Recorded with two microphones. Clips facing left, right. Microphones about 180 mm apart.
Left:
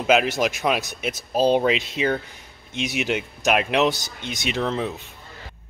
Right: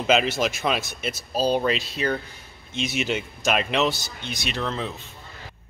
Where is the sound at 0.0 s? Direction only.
10° left (ahead or behind).